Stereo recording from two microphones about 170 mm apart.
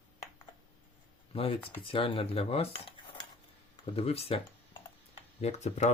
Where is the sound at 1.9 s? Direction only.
30° left (ahead or behind).